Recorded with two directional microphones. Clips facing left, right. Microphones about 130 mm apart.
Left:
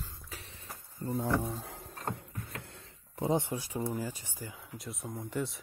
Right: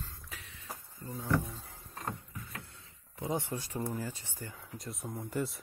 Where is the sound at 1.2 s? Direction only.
45° left (ahead or behind).